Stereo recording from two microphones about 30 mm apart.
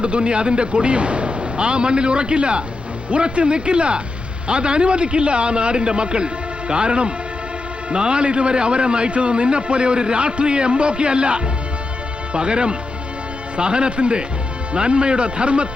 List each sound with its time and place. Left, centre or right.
0.0 s a man's voice: right